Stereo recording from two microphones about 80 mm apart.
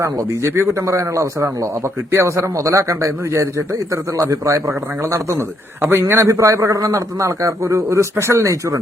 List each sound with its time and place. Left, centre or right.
0.0 s a man's voice: right